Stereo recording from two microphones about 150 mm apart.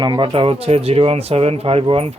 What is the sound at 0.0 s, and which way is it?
Speech, 30° right (ahead or behind).